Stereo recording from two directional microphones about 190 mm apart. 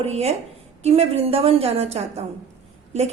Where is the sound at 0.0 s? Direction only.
35° right (ahead or behind).